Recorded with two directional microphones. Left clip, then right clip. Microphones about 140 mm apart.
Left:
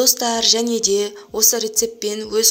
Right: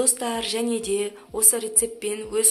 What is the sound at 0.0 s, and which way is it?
Speech, 35° left (ahead or behind).